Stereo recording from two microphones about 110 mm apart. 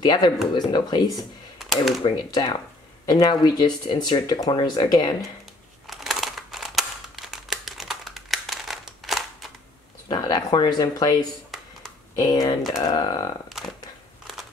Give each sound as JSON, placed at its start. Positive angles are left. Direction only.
{"t": 0.0, "sound": "speech", "side_deg": 40}
{"t": 1.6, "sound": "a sound", "side_deg": 0}
{"t": 2.0, "sound": "speech", "side_deg": 45}
{"t": 5.9, "sound": "a sound", "side_deg": 0}
{"t": 10.0, "sound": "speech", "side_deg": 40}
{"t": 11.8, "sound": "computer keyboard", "side_deg": 35}
{"t": 12.8, "sound": "speech", "side_deg": 40}